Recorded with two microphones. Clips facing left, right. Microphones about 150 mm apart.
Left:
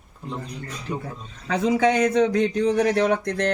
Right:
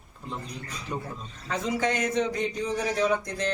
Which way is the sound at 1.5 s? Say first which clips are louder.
Left 8 dB; 65° left (ahead or behind).